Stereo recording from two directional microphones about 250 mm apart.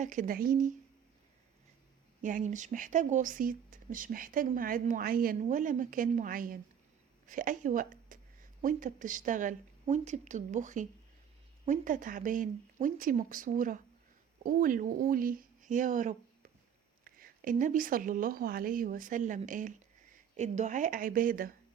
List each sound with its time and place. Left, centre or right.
0.0 s speech: right
2.2 s a woman's voice: right